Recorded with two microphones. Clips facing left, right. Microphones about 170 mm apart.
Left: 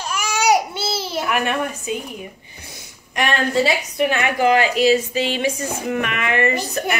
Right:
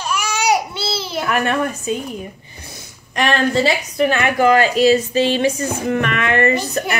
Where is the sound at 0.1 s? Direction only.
45° left (ahead or behind).